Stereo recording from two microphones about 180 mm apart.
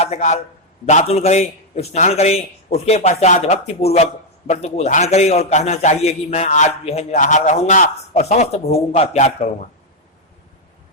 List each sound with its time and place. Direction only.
0.0 s a man's voice: 40° left (ahead or behind)